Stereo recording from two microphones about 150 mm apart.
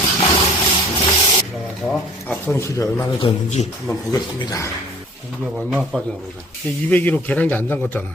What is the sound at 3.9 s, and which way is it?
Speech, 20° left (ahead or behind).